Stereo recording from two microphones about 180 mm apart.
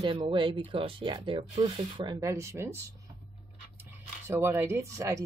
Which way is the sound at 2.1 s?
15° right (ahead or behind).